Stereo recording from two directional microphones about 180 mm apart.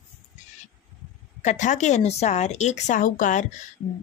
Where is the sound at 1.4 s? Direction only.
40° left (ahead or behind).